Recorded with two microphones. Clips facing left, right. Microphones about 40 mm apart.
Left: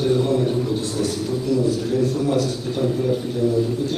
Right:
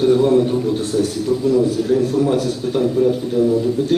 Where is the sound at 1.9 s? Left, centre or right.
Right.